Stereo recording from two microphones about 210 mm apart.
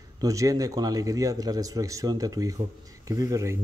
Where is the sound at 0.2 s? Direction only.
15° right (ahead or behind).